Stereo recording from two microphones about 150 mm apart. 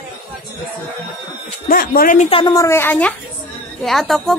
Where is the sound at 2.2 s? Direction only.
35° left (ahead or behind).